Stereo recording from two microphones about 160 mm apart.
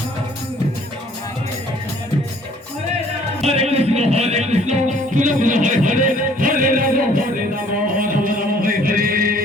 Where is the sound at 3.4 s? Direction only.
40° right (ahead or behind).